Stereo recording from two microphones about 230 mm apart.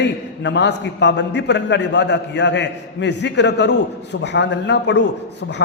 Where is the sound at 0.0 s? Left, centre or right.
Left.